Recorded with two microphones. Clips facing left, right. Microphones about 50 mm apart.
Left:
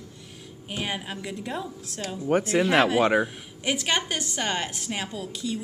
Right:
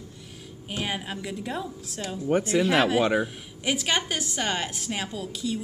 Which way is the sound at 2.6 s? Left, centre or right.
Centre.